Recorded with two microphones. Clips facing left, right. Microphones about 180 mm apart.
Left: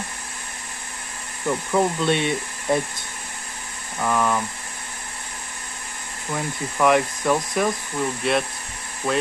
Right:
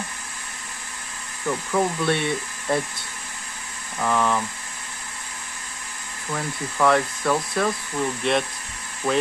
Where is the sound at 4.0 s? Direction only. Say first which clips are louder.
Even; 5° left (ahead or behind).